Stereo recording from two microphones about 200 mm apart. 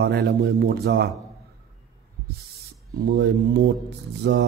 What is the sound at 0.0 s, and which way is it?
A man's voice, 50° right (ahead or behind).